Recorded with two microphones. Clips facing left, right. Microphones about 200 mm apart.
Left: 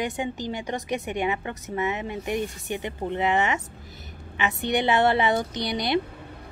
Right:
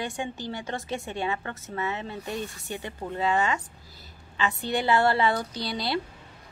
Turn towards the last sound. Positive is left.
turn(degrees=20)  # may be behind; listen again after turning